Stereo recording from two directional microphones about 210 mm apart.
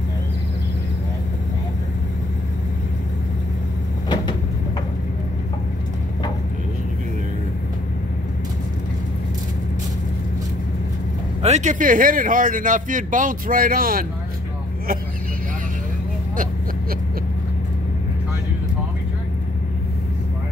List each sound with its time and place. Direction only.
11.4 s a man's voice: 35° right (ahead or behind)